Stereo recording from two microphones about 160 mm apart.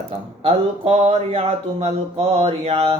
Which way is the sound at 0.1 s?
40° right (ahead or behind).